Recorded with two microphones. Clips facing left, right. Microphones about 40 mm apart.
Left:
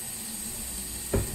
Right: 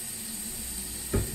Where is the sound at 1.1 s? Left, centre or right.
Centre.